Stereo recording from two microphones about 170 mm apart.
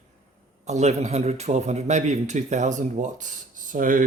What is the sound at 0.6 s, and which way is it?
A man's voice, 40° right (ahead or behind).